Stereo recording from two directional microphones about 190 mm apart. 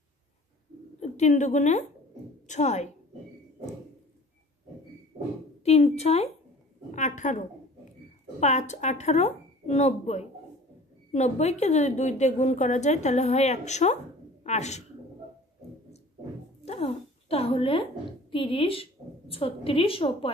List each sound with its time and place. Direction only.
1.0 s a woman's voice: 35° left (ahead or behind)
5.6 s a woman's voice: 35° left (ahead or behind)
16.6 s a woman's voice: 35° left (ahead or behind)